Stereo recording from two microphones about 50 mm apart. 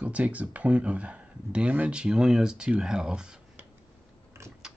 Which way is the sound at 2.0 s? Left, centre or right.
Centre.